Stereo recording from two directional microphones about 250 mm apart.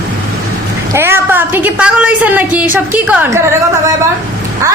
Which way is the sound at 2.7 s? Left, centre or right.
Centre.